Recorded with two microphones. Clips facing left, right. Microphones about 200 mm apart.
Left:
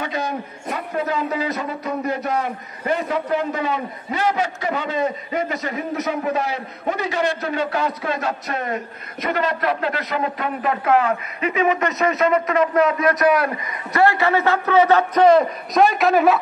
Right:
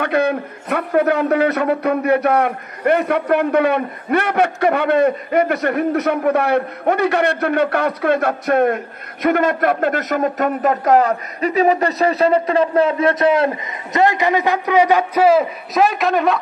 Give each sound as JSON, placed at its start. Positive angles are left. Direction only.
{"t": 0.0, "sound": "a man's voice", "side_deg": -60}